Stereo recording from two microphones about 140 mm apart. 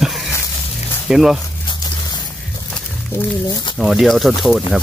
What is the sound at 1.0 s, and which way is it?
Speech, 5° right (ahead or behind).